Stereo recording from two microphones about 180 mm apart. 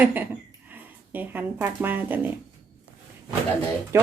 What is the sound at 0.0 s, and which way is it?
A woman's voice, 10° right (ahead or behind).